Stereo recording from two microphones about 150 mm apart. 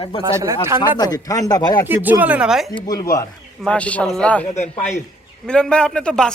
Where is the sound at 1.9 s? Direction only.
10° right (ahead or behind).